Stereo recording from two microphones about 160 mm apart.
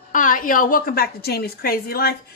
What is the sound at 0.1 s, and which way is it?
A woman's voice, 55° left (ahead or behind).